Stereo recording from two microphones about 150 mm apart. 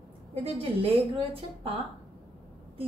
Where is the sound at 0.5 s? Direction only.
40° right (ahead or behind).